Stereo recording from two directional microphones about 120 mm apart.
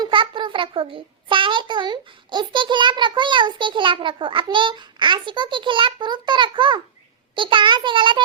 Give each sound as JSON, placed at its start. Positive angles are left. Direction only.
{"t": 0.0, "sound": "a child's voice", "side_deg": -40}